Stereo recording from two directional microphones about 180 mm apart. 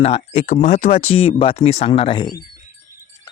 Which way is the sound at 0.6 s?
45° left (ahead or behind).